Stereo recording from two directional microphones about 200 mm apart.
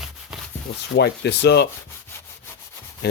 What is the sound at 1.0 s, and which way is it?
Speech, 55° left (ahead or behind).